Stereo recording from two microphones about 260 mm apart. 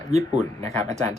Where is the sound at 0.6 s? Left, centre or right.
Right.